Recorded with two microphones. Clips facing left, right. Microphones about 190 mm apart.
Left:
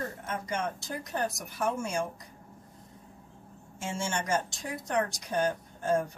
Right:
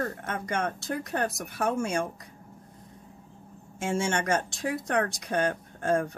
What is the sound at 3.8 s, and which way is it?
Speech, 60° right (ahead or behind).